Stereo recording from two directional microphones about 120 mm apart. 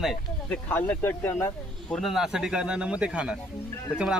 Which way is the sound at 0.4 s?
10° left (ahead or behind).